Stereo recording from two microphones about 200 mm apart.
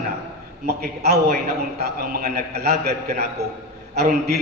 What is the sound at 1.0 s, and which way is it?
A man's voice, 50° right (ahead or behind).